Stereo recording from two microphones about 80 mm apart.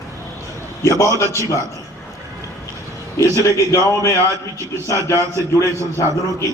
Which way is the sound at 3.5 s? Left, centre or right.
Left.